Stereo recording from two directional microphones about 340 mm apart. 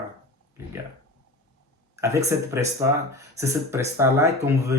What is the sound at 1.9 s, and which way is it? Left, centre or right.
Speech, centre.